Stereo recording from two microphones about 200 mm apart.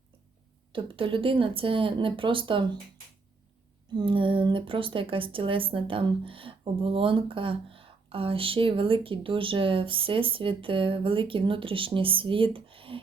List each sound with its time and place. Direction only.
0.7 s a woman's voice: 25° right (ahead or behind)
3.9 s a woman's voice: 25° right (ahead or behind)